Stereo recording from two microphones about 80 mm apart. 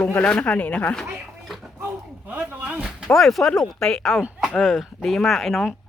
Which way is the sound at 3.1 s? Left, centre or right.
Centre.